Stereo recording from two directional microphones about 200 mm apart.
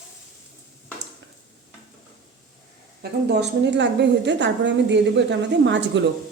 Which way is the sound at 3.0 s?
55° right (ahead or behind).